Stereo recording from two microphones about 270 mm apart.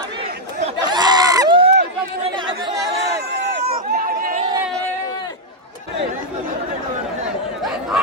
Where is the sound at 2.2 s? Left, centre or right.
Centre.